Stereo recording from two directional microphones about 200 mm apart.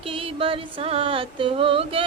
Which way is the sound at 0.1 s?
25° right (ahead or behind).